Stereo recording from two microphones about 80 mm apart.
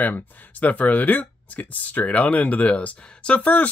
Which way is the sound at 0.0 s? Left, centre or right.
Left.